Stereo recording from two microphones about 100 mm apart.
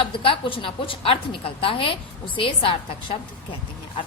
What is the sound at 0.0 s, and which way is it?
A woman's voice, 60° left (ahead or behind).